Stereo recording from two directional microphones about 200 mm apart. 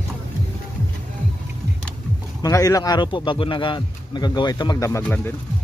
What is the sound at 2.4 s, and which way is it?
A man's voice, 15° left (ahead or behind).